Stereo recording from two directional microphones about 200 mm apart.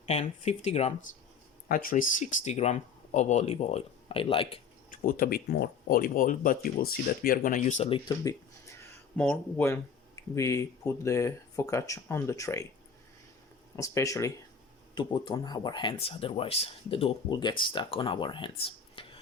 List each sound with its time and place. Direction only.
0.0 s speech: 30° left (ahead or behind)
1.6 s speech: 45° left (ahead or behind); by 4.6 s 25° left (ahead or behind)
4.9 s speech: 45° left (ahead or behind); by 8.7 s 20° left (ahead or behind)
9.1 s speech: 5° left (ahead or behind)
13.7 s speech: 15° left (ahead or behind)